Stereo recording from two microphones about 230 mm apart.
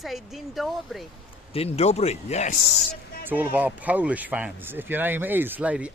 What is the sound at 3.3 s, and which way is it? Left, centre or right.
Speech, centre.